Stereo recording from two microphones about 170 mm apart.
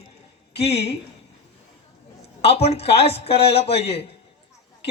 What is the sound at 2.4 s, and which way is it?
Speech, 35° left (ahead or behind).